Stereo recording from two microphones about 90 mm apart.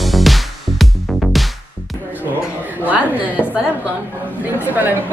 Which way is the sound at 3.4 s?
15° left (ahead or behind).